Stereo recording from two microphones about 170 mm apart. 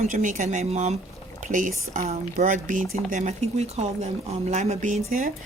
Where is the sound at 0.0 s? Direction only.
50° right (ahead or behind).